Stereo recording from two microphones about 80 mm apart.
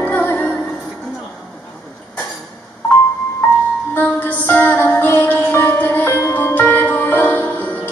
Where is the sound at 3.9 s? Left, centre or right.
Left.